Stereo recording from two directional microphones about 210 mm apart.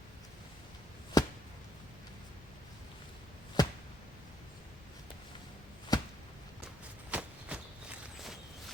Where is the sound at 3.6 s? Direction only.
15° left (ahead or behind).